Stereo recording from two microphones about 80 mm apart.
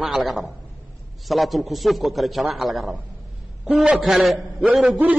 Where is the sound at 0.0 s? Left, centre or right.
Centre.